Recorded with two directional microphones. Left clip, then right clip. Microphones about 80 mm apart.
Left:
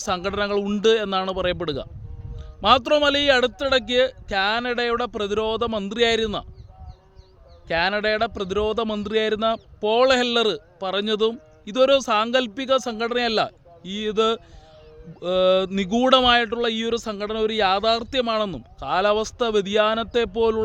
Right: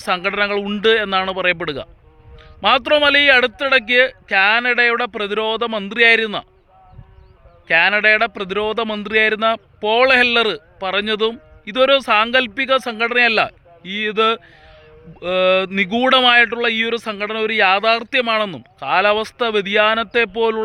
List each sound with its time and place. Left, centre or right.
0.0 s speech: left
7.7 s speech: centre